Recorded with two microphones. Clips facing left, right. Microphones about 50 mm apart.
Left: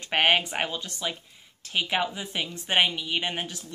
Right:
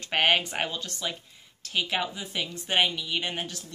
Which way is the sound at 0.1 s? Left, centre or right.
Centre.